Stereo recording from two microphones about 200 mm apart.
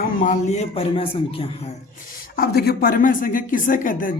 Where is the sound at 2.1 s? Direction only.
50° left (ahead or behind).